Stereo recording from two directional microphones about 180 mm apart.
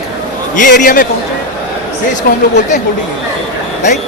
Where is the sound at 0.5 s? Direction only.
45° left (ahead or behind).